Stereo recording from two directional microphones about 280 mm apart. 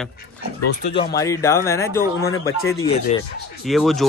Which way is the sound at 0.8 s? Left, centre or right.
Centre.